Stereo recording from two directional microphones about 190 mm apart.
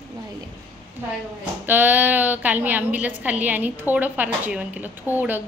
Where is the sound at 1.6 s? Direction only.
10° right (ahead or behind).